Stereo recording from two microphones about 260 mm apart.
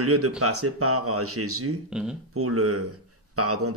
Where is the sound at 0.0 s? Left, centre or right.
Right.